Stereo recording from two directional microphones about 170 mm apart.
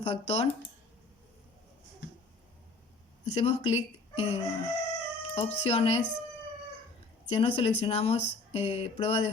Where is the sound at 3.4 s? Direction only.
40° left (ahead or behind).